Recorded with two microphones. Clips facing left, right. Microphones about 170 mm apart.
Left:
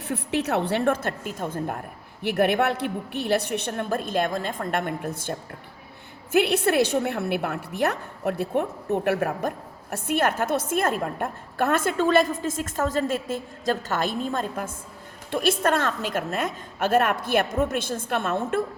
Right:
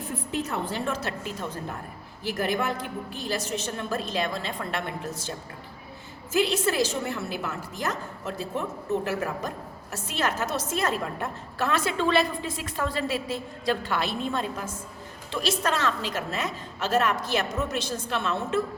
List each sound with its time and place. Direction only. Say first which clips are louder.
0.0 s a woman's voice: left 4 dB; 75° left (ahead or behind); by 1.8 s 55° left (ahead or behind)
2.2 s a woman's voice: left 6 dB; 65° left (ahead or behind)